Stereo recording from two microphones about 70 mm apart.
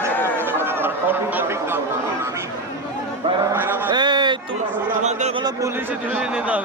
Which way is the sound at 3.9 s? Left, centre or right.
Right.